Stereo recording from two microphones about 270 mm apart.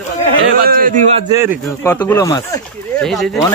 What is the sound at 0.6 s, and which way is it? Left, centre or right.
Speech, right.